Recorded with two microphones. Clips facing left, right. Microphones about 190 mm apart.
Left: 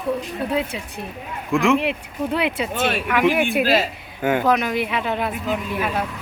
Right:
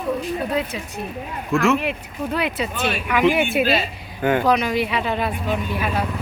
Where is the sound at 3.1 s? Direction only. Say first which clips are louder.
Right 2 dB; centre (ahead or behind).